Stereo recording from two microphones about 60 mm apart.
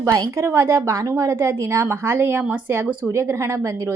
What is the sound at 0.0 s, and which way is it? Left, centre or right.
Speech, right.